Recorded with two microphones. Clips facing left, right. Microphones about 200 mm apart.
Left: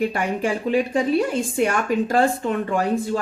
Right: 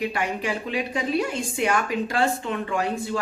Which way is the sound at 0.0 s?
45° left (ahead or behind).